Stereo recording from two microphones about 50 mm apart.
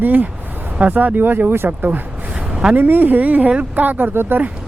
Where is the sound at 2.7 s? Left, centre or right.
Right.